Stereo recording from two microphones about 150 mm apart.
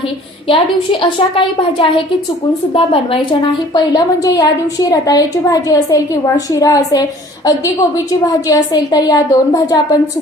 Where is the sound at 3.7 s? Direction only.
25° left (ahead or behind).